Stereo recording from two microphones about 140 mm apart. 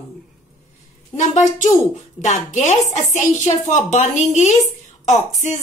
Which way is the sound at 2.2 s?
60° left (ahead or behind).